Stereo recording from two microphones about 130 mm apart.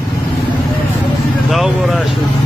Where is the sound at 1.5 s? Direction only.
Centre (ahead or behind).